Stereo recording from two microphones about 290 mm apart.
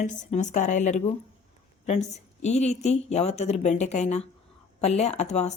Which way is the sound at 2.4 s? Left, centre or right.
Left.